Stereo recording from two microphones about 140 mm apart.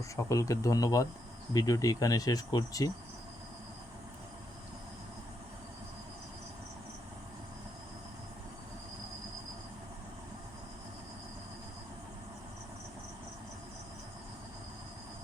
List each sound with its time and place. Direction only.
0.2 s speech: 20° left (ahead or behind)